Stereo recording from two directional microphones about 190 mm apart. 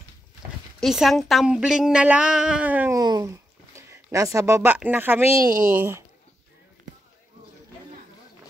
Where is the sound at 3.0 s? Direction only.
20° right (ahead or behind).